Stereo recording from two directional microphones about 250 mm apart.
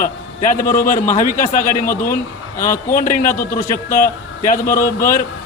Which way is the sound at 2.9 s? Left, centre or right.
Left.